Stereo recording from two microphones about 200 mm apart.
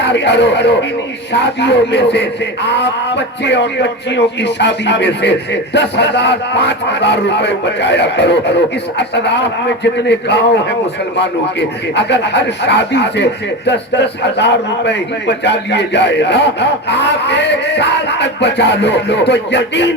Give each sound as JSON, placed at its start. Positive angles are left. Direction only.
{"t": 0.0, "sound": "a man's voice", "side_deg": 60}
{"t": 11.9, "sound": "a man's voice", "side_deg": 60}